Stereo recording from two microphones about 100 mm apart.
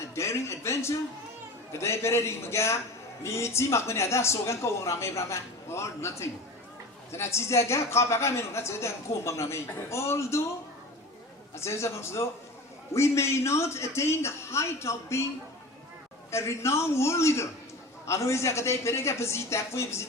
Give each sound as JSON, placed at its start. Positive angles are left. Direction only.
{"t": 0.1, "sound": "a woman's voice", "side_deg": 25}
{"t": 11.5, "sound": "a woman's voice", "side_deg": 30}
{"t": 16.3, "sound": "a woman's voice", "side_deg": 30}